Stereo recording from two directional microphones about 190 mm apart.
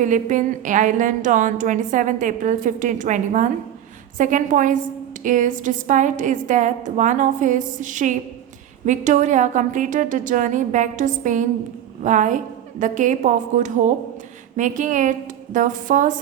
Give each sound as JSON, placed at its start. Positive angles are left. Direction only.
{"t": 0.0, "sound": "a woman's voice", "side_deg": -40}